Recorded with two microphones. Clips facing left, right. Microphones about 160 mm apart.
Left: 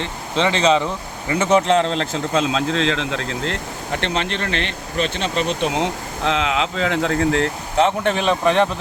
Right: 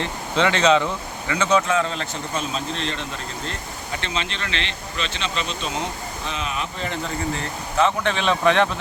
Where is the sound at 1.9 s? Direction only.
90° left.